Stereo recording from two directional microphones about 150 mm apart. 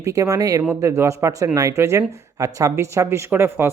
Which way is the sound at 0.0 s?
20° right (ahead or behind).